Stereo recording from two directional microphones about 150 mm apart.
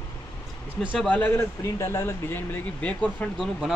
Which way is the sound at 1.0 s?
10° left (ahead or behind).